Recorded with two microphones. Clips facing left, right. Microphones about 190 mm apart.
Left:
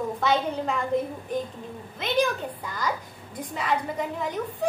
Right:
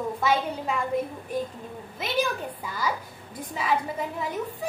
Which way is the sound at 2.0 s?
5° right (ahead or behind).